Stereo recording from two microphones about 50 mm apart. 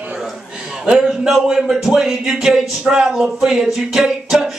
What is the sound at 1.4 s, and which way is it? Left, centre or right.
Speech, centre.